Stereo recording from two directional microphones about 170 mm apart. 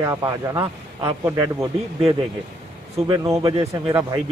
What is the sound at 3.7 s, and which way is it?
Speech, 20° right (ahead or behind).